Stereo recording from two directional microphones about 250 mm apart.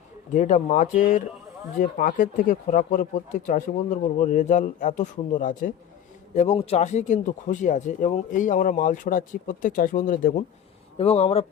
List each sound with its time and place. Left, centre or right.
0.3 s speech: left